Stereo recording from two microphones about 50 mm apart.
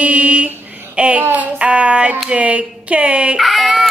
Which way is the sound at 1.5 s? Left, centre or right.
Right.